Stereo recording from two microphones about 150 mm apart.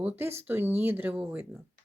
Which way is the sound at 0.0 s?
15° right (ahead or behind).